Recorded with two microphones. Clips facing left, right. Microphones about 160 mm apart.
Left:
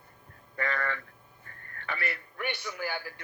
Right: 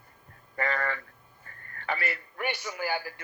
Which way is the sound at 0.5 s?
45° right (ahead or behind).